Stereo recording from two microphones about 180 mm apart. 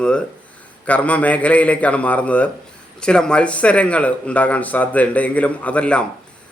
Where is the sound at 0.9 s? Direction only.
5° left (ahead or behind).